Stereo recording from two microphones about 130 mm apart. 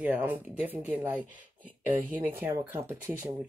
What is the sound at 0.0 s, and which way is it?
Speech, 10° right (ahead or behind).